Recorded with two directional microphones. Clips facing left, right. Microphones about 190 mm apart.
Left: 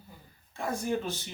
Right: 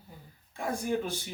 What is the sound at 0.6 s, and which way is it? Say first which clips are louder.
Speech: even; 15° right (ahead or behind).